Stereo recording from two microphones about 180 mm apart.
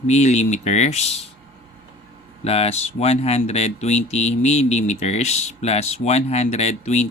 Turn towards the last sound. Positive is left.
turn(degrees=35)  # may be behind; listen again after turning